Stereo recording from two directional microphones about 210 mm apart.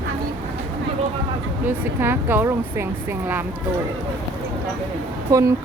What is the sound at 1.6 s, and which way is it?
Speech, 10° right (ahead or behind).